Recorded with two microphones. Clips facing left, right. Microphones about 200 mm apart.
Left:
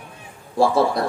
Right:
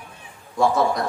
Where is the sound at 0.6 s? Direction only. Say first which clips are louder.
Left 2 dB; 30° left (ahead or behind).